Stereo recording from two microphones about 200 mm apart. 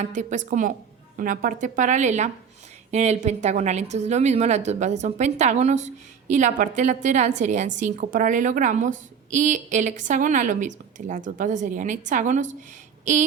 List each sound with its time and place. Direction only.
0.0 s a woman's voice: 40° right (ahead or behind)